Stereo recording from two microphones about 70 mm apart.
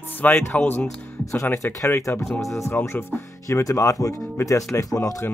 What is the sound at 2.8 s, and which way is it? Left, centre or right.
Speech, left.